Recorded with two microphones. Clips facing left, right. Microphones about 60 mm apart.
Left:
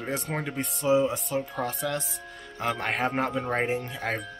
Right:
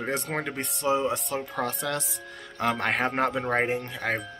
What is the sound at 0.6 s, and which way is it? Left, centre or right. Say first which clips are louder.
Speech: left 4 dB; right.